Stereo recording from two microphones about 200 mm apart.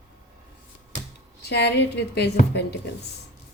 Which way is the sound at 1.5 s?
55° left (ahead or behind).